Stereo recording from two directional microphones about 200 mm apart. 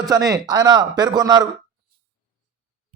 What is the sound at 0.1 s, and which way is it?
A man's voice, 20° right (ahead or behind).